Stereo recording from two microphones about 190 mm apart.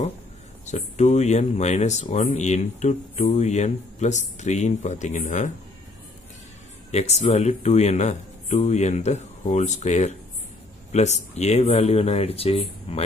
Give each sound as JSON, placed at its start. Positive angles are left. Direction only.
{"t": 0.7, "sound": "speech", "side_deg": 35}
{"t": 6.9, "sound": "speech", "side_deg": 35}